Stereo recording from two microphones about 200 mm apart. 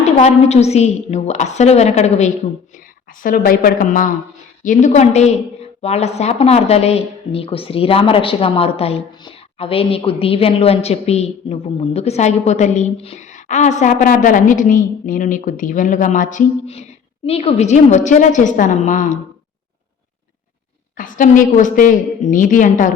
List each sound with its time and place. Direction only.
0.0 s speech: 35° left (ahead or behind)
3.2 s speech: 45° left (ahead or behind)
20.9 s speech: 40° left (ahead or behind)